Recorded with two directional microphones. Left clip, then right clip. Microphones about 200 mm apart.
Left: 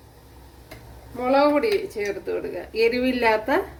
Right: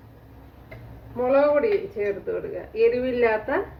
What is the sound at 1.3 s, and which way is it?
Speech, 70° left (ahead or behind).